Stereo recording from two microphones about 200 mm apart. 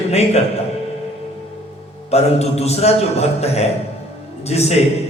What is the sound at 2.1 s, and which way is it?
A man's voice, 30° left (ahead or behind).